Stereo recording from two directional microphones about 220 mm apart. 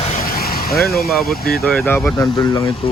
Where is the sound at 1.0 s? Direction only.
Centre (ahead or behind).